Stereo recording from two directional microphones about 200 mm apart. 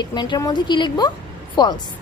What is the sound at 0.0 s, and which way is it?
A woman's voice, 20° left (ahead or behind).